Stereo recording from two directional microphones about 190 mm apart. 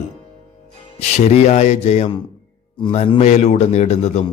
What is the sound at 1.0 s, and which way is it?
A man's voice, 35° left (ahead or behind).